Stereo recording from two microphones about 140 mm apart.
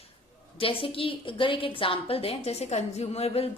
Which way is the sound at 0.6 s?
40° left (ahead or behind).